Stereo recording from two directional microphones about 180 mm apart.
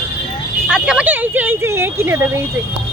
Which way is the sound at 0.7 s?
5° right (ahead or behind).